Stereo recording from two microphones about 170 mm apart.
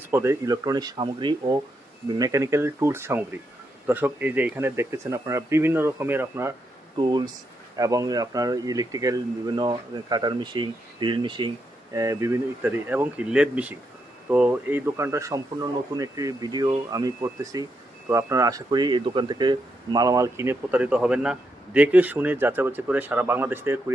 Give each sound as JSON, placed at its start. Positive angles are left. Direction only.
{"t": 0.1, "sound": "speech", "side_deg": -15}
{"t": 6.9, "sound": "speech", "side_deg": -25}